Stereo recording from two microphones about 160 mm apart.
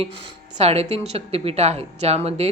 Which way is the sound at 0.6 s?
40° right (ahead or behind).